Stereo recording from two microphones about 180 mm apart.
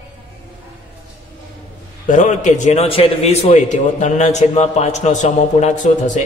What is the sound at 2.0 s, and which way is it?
A man's voice, 45° left (ahead or behind).